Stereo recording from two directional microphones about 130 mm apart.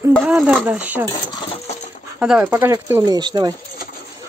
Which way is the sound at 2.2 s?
5° right (ahead or behind).